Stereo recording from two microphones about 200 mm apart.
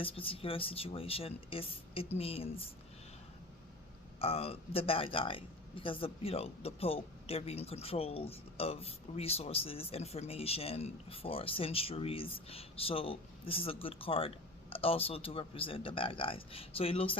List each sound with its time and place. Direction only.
0.0 s speech: 25° left (ahead or behind)
4.2 s speech: 30° left (ahead or behind)